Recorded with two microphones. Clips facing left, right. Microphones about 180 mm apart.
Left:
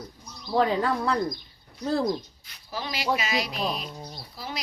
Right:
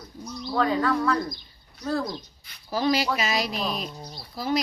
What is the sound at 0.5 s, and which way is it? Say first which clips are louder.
Speech: even; 25° left (ahead or behind).